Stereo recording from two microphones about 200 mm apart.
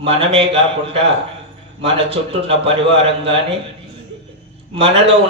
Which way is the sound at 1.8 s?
30° right (ahead or behind).